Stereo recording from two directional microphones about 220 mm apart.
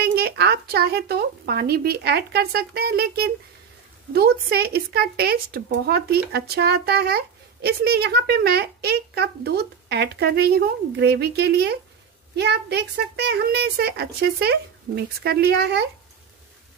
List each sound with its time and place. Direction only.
0.1 s a woman's voice: 45° right (ahead or behind)